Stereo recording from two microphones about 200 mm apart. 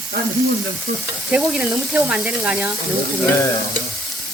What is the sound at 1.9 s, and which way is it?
Speech, 5° right (ahead or behind).